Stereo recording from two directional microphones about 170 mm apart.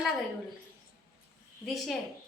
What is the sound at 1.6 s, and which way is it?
Speech, centre (ahead or behind).